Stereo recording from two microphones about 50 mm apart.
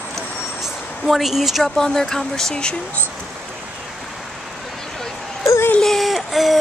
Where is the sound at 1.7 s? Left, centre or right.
Centre.